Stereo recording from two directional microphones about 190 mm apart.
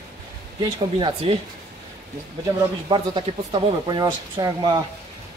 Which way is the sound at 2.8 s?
25° right (ahead or behind).